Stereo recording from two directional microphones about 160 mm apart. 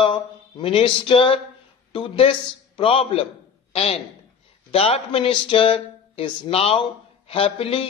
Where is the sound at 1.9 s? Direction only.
30° left (ahead or behind).